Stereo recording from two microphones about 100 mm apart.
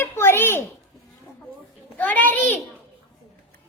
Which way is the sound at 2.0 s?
15° left (ahead or behind).